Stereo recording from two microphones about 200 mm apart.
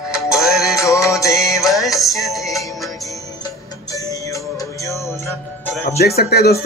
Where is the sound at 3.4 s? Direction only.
20° left (ahead or behind).